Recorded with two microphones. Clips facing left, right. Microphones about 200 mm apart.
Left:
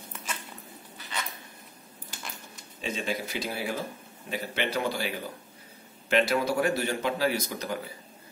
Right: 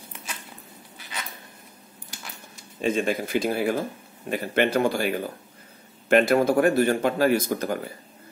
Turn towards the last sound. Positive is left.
turn(degrees=-50)  # may be behind; listen again after turning